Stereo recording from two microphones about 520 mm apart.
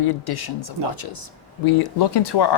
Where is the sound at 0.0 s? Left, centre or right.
Left.